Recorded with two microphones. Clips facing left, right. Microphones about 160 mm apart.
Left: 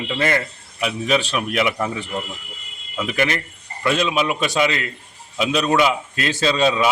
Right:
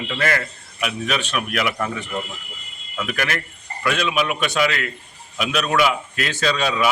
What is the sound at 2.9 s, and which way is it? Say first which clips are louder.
A man's voice: left 3 dB; 20° left (ahead or behind).